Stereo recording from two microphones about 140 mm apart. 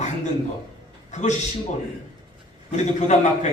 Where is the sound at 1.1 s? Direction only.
60° left (ahead or behind).